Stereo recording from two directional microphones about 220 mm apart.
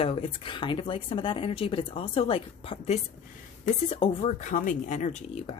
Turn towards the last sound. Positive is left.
turn(degrees=30)  # may be behind; listen again after turning